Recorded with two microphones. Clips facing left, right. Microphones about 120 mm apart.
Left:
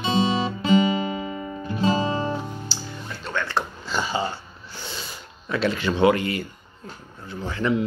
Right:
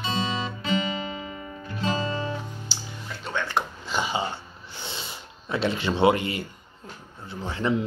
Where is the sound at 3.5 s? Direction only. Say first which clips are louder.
Left 1 dB; 20° right (ahead or behind).